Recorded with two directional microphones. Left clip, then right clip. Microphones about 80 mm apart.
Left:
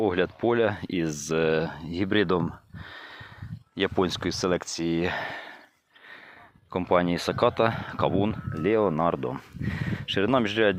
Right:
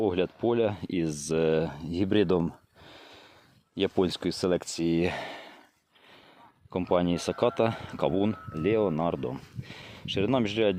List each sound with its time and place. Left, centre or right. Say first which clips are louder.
0.0 s speech: left 2 dB; centre
1.5 s speech: left 1 dB; right
3.8 s speech: left 1 dB; right
4.6 s speech: even; right
4.9 s speech: left 1 dB; right
6.7 s speech: left 3 dB; right
7.8 s speech: left 2 dB; right
8.6 s speech: left 3 dB; centre